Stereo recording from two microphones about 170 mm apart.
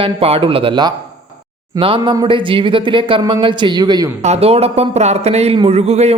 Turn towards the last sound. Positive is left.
turn(degrees=-40)  # may be behind; listen again after turning